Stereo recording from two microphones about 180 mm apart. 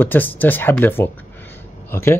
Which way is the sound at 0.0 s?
10° left (ahead or behind).